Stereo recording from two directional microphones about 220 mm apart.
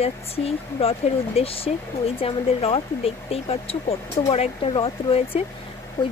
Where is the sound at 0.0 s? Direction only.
25° left (ahead or behind).